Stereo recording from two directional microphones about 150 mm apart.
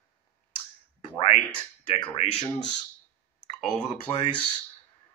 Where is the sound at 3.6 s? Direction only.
Centre (ahead or behind).